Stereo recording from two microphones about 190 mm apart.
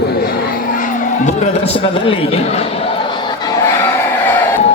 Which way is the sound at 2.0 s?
30° left (ahead or behind).